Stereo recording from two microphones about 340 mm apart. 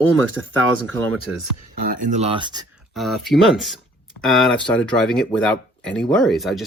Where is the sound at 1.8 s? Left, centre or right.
Right.